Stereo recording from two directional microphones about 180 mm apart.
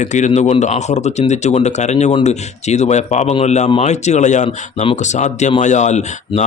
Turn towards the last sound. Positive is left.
turn(degrees=40)  # may be behind; listen again after turning